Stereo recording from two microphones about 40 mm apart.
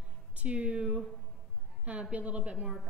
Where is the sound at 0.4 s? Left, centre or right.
Right.